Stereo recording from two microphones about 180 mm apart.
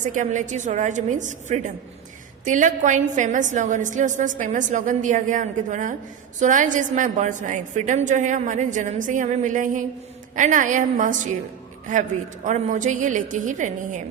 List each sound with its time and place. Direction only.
0.0 s a woman's voice: 45° right (ahead or behind)
12.5 s a woman's voice: 45° right (ahead or behind)